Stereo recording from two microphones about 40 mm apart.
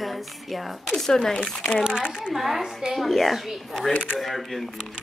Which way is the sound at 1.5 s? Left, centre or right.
Centre.